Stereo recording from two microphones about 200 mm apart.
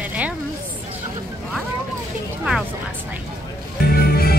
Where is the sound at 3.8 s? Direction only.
50° left (ahead or behind).